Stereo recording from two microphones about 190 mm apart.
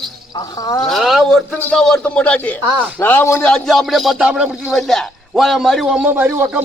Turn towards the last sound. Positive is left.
turn(degrees=-10)  # may be behind; listen again after turning